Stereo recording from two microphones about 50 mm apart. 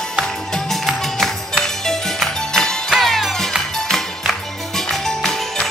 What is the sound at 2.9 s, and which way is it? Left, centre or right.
Music, centre.